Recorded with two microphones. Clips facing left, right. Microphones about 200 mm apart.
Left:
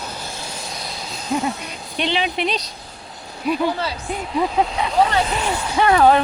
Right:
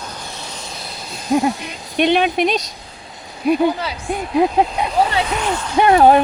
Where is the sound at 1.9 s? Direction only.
55° right (ahead or behind).